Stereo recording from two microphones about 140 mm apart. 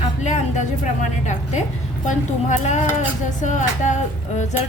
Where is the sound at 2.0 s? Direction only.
60° left (ahead or behind).